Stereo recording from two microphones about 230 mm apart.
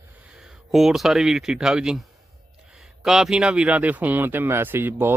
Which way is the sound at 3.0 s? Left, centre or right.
Centre.